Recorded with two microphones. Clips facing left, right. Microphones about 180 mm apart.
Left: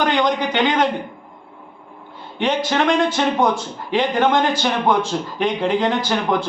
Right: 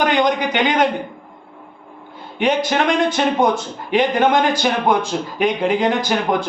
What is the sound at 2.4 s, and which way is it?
Speech, 15° right (ahead or behind).